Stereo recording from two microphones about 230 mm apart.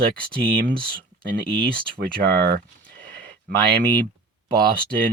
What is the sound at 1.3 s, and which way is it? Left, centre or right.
Speech, right.